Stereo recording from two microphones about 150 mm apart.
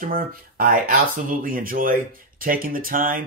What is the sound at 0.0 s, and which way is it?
Speech, 70° right (ahead or behind).